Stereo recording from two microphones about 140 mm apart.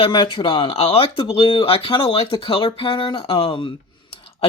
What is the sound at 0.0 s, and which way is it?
Speech, 35° left (ahead or behind).